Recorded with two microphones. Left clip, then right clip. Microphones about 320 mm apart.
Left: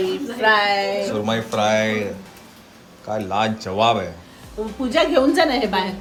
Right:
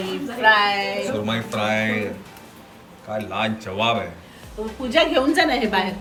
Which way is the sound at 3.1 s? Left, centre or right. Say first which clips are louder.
Left 3 dB; centre.